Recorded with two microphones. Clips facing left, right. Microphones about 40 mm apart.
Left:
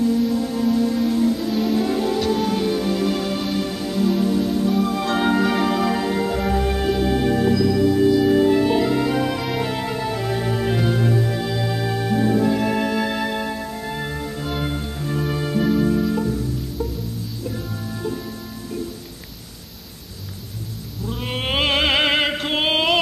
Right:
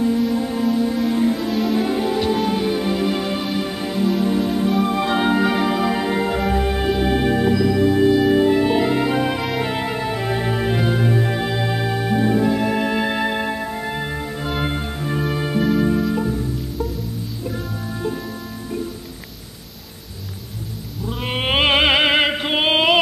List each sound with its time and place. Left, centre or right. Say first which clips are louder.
0.3 s music: right 1 dB; right
0.7 s music: left 1 dB; centre
1.1 s music: right 1 dB; right
1.5 s music: right 1 dB; centre
1.8 s music: right 1 dB; centre
21.0 s opera: right 3 dB; centre